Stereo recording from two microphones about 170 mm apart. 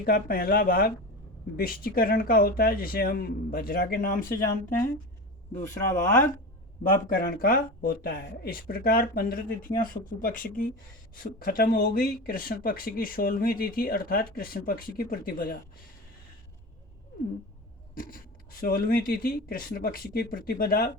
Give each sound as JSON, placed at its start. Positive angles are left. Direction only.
{"t": 0.0, "sound": "speech", "side_deg": 60}
{"t": 5.9, "sound": "speech", "side_deg": 15}
{"t": 6.8, "sound": "speech", "side_deg": 55}
{"t": 18.6, "sound": "speech", "side_deg": 55}